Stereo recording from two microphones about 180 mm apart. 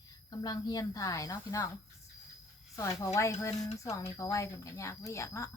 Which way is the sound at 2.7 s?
20° left (ahead or behind).